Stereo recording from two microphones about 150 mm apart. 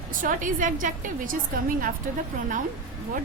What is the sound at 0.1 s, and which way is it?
A woman's voice, 65° right (ahead or behind).